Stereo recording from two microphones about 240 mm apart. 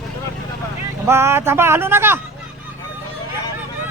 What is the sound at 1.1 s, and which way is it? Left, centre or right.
Speech, centre.